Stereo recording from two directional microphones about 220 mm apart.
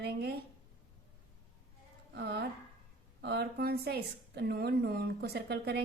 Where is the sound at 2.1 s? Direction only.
50° right (ahead or behind).